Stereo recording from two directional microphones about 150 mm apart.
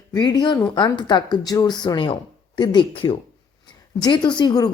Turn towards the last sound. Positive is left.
turn(degrees=25)  # may be behind; listen again after turning